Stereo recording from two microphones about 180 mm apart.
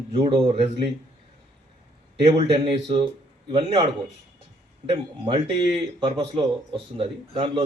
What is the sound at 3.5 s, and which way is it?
Speech, 25° right (ahead or behind).